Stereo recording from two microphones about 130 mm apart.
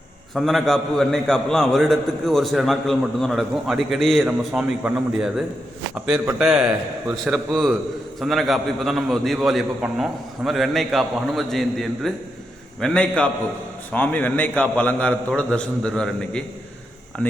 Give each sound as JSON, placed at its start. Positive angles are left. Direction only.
{"t": 0.3, "sound": "a man's voice", "side_deg": 0}
{"t": 4.2, "sound": "a man's voice", "side_deg": -10}
{"t": 6.4, "sound": "a man's voice", "side_deg": -5}